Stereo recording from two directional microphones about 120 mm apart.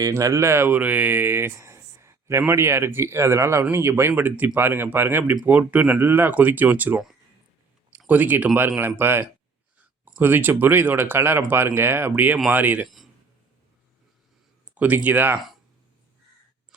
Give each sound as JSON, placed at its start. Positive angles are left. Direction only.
{"t": 0.0, "sound": "speech", "side_deg": -25}
{"t": 14.8, "sound": "speech", "side_deg": -15}